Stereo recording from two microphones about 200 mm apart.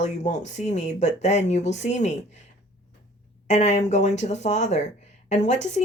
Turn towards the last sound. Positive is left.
turn(degrees=35)  # may be behind; listen again after turning